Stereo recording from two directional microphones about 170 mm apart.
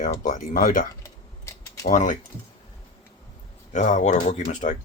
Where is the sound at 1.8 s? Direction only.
50° left (ahead or behind).